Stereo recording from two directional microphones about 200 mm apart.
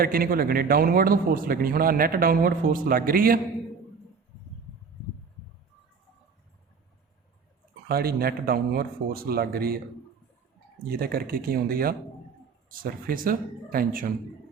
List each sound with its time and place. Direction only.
0.0 s speech: 45° right (ahead or behind)
7.9 s speech: 50° right (ahead or behind)
10.8 s speech: 50° right (ahead or behind)